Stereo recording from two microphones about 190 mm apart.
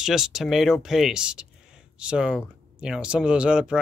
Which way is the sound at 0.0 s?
Centre (ahead or behind).